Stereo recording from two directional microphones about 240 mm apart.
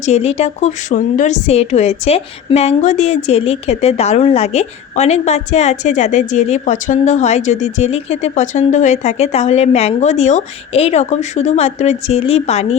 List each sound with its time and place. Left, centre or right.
0.0 s a woman's voice: left